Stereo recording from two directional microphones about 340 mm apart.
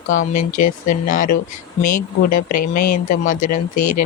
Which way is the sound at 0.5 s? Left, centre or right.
Left.